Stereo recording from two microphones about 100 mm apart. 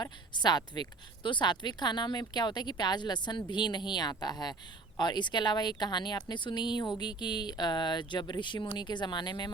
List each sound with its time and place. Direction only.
0.0 s a woman's voice: 45° left (ahead or behind)